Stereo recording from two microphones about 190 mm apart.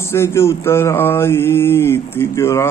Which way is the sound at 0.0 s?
15° left (ahead or behind).